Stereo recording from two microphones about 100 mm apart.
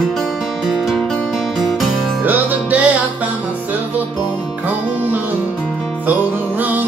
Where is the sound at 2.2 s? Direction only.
15° right (ahead or behind).